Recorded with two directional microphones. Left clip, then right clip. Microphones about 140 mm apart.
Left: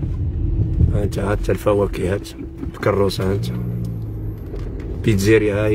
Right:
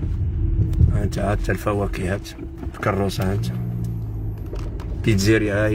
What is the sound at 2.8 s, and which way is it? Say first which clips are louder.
Speech: left 5 dB; 10° left (ahead or behind).